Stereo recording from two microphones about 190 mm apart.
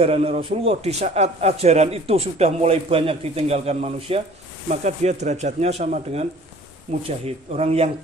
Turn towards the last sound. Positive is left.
turn(degrees=-30)  # may be behind; listen again after turning